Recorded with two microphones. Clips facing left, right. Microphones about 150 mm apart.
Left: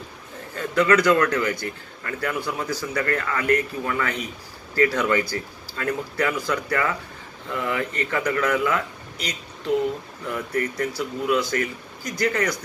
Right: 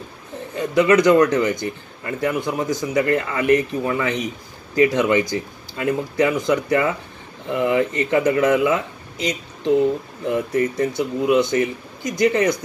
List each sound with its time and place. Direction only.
0.6 s a man's voice: 20° right (ahead or behind)
10.3 s a man's voice: 20° right (ahead or behind)